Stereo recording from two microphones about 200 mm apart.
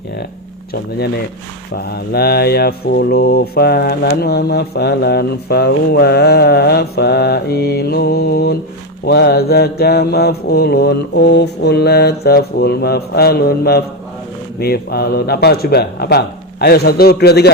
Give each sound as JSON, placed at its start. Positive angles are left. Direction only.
{"t": 0.7, "sound": "mantra", "side_deg": 55}